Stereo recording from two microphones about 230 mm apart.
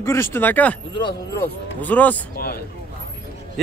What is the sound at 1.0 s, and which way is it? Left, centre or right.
Speech, centre.